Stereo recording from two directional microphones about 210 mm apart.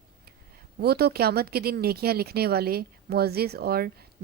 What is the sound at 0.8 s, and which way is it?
Speech, 50° right (ahead or behind).